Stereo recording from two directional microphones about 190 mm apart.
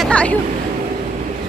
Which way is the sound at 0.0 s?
5° left (ahead or behind).